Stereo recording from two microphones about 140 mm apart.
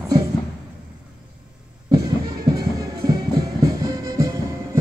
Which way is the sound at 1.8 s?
25° right (ahead or behind).